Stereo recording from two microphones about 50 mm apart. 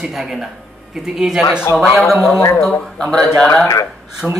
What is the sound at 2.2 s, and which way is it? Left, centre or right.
Speech, left.